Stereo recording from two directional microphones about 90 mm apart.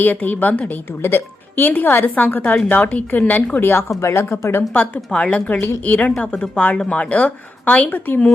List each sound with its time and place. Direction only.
0.0 s a woman's voice: 20° left (ahead or behind)
4.7 s a woman's voice: 15° left (ahead or behind)